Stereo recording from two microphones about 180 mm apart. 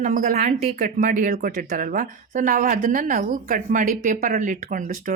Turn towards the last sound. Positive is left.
turn(degrees=-50)  # may be behind; listen again after turning